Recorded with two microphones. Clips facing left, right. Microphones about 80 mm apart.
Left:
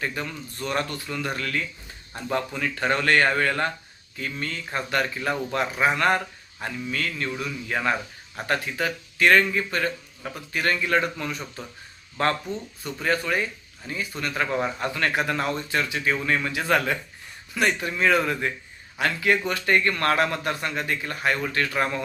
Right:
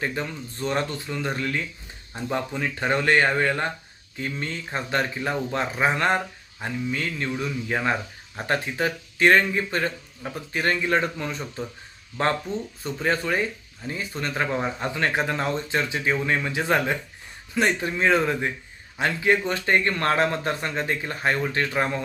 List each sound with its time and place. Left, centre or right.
0.0 s speech: right